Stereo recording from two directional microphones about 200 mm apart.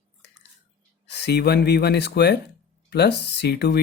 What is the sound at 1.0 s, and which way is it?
Speech, 55° left (ahead or behind).